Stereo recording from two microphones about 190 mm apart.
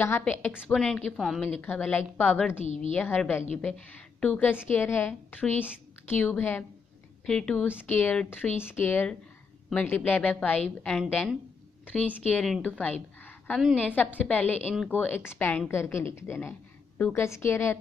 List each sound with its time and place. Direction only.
0.0 s a woman's voice: 10° left (ahead or behind)
2.6 s a woman's voice: 40° left (ahead or behind)
2.9 s a woman's voice: 10° left (ahead or behind)
11.8 s a sound: 10° left (ahead or behind)
12.4 s a woman's voice: 5° left (ahead or behind)